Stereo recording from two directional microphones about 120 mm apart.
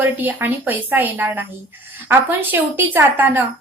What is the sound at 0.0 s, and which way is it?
A woman's voice, 15° right (ahead or behind).